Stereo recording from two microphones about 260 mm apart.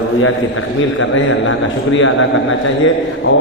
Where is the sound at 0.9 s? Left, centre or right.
Left.